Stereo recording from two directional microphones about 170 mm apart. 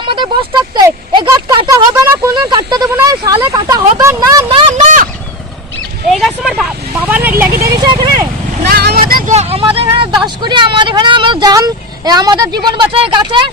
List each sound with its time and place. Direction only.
0.0 s speech: 30° right (ahead or behind)
6.1 s vehicle: centre (ahead or behind)
7.8 s vehicle: 25° right (ahead or behind)
8.7 s vehicle: 65° right (ahead or behind)
9.3 s vehicle: 35° right (ahead or behind)
10.2 s speech: 25° right (ahead or behind)